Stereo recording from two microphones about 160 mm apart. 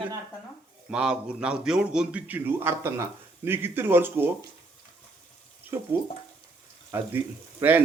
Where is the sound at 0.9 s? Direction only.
5° right (ahead or behind).